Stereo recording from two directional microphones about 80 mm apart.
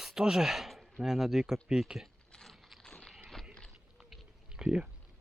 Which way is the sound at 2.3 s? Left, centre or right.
Centre.